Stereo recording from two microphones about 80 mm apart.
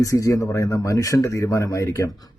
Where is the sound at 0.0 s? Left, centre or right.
Left.